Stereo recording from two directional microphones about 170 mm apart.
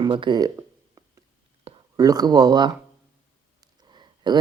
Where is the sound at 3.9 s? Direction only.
25° right (ahead or behind).